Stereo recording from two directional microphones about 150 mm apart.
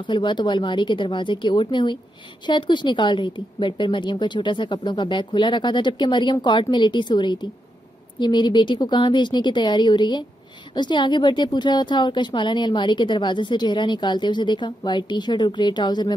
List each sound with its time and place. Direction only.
0.0 s a woman's voice: 30° left (ahead or behind)